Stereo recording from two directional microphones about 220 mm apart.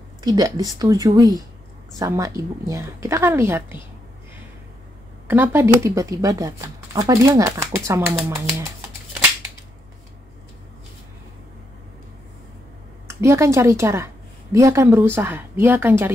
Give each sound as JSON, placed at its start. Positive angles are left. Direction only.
{"t": 0.2, "sound": "a woman's voice", "side_deg": -15}
{"t": 5.3, "sound": "a woman's voice", "side_deg": -10}
{"t": 13.1, "sound": "a woman's voice", "side_deg": -15}